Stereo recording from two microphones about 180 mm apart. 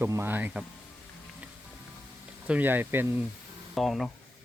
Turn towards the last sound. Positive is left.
turn(degrees=0)  # may be behind; listen again after turning